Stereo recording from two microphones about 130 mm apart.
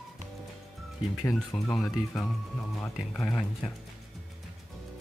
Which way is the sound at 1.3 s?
Centre (ahead or behind).